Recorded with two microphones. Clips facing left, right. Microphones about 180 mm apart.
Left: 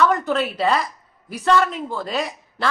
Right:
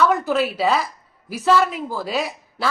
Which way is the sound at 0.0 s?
5° right (ahead or behind).